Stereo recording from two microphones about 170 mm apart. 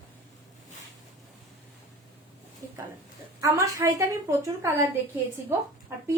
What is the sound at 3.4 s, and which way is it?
A woman's voice, 20° right (ahead or behind).